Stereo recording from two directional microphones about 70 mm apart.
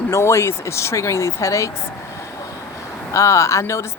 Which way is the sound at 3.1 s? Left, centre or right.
Left.